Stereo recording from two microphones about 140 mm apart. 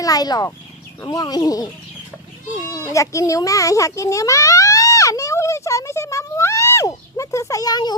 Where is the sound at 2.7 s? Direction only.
20° left (ahead or behind).